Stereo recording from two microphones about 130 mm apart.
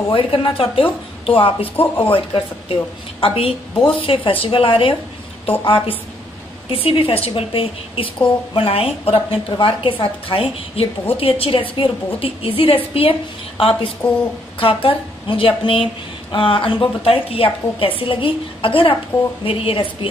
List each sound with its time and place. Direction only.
0.1 s a woman's voice: 40° left (ahead or behind)